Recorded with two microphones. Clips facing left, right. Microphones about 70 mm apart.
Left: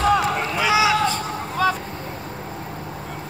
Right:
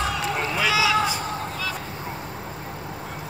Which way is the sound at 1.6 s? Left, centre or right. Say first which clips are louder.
Left 15 dB; left.